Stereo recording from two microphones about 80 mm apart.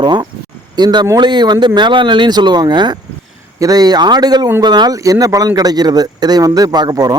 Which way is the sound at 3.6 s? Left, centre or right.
Right.